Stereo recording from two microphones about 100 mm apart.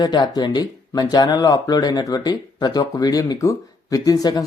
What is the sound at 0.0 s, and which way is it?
Speech, 45° left (ahead or behind).